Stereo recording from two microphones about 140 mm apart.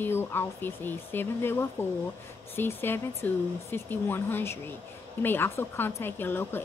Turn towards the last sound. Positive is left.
turn(degrees=15)  # may be behind; listen again after turning